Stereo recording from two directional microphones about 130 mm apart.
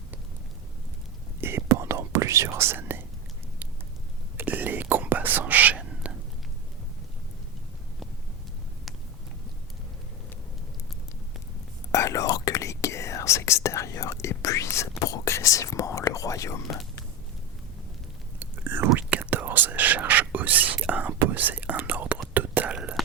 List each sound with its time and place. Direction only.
1.4 s whispering: 20° right (ahead or behind)
4.4 s whispering: 15° right (ahead or behind)
11.9 s whispering: 25° left (ahead or behind)
18.3 s whispering: 15° right (ahead or behind)